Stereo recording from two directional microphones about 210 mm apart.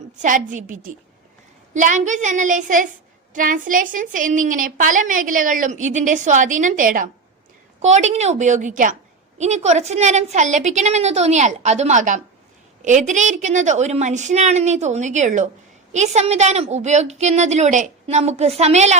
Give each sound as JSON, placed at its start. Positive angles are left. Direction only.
{"t": 0.2, "sound": "a woman's voice", "side_deg": -40}